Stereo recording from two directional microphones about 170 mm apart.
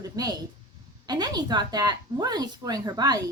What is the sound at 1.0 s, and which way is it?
A woman's voice, 25° right (ahead or behind).